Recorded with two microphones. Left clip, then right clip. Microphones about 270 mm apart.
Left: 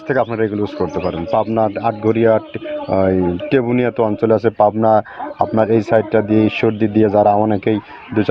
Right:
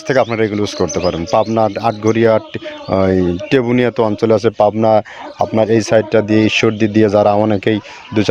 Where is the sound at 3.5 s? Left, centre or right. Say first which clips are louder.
Right 3 dB; right.